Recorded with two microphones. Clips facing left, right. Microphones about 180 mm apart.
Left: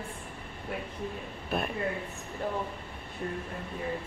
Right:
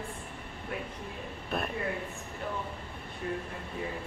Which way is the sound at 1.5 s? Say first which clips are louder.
Left 2 dB; centre (ahead or behind).